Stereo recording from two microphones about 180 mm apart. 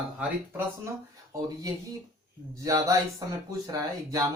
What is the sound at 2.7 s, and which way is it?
Speech, 20° right (ahead or behind).